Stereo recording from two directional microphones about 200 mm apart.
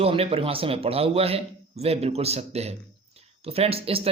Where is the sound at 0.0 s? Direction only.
30° right (ahead or behind).